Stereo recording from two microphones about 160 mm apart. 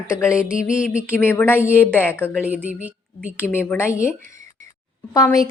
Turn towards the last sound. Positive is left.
turn(degrees=20)  # may be behind; listen again after turning